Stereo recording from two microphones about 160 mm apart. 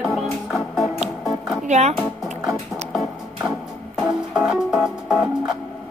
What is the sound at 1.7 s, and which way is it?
Speech, 45° right (ahead or behind).